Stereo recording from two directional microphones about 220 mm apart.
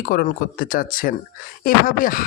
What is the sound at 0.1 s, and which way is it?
A man's voice, 40° left (ahead or behind).